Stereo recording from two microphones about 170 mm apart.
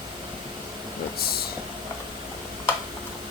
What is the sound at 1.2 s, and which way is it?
Speech, 65° left (ahead or behind).